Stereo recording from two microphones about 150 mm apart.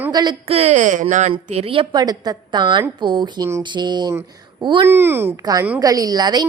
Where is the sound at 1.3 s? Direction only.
40° right (ahead or behind).